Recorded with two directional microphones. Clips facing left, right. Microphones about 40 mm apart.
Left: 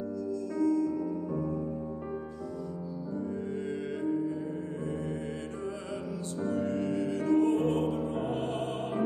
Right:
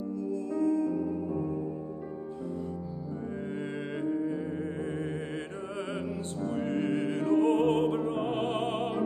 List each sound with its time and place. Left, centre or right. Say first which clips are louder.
6.5 s music: right 1 dB; right